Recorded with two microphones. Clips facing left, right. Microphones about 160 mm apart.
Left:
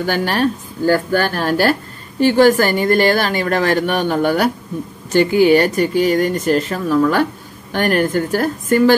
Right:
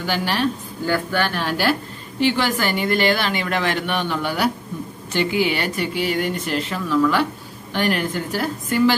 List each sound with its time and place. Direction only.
0.0 s a woman's voice: 50° left (ahead or behind)